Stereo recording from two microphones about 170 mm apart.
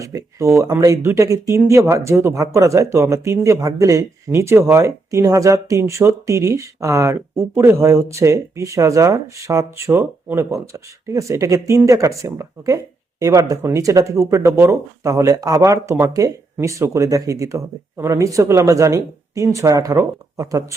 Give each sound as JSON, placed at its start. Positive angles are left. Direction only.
{"t": 0.0, "sound": "speech", "side_deg": -20}